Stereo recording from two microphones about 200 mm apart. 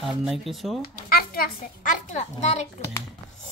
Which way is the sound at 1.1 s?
50° left (ahead or behind).